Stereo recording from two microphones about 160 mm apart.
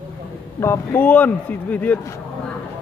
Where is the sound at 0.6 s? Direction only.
15° left (ahead or behind).